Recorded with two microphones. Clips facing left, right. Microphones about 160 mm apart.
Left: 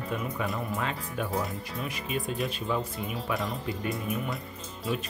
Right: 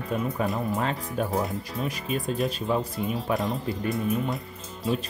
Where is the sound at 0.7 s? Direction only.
35° right (ahead or behind).